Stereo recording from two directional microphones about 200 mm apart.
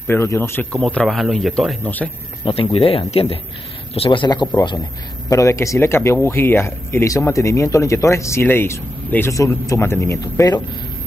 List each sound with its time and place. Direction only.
0.0 s a man's voice: 10° left (ahead or behind)
2.4 s speech: 25° left (ahead or behind)